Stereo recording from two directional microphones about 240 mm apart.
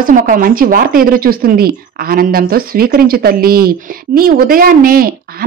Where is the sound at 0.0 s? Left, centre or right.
Right.